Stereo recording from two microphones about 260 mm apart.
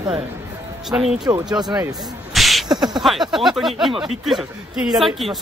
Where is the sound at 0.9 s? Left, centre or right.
Centre.